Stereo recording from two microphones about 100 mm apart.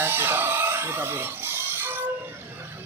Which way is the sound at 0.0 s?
20° right (ahead or behind).